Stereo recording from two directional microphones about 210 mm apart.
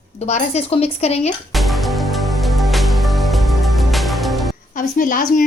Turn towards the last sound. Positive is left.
turn(degrees=40)  # may be behind; listen again after turning